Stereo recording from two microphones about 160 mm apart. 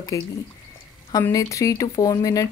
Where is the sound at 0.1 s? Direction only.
20° left (ahead or behind).